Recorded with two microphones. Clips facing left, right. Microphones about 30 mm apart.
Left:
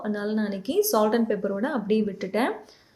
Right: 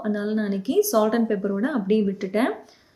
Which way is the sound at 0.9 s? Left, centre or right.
Centre.